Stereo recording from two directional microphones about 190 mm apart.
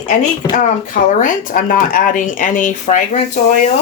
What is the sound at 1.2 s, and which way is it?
Speech, 45° left (ahead or behind).